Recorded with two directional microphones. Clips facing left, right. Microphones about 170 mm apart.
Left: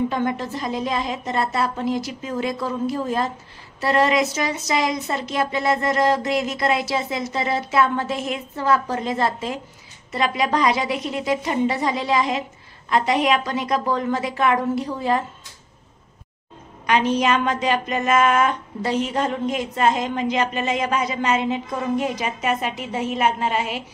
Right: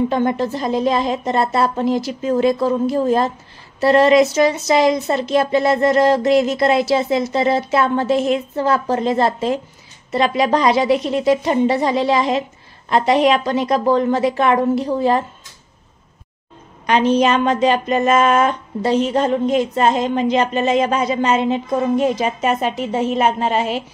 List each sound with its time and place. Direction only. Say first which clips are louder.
0.1 s a woman's voice: right 6 dB; 30° right (ahead or behind)
16.8 s a woman's voice: right 5 dB; 30° right (ahead or behind)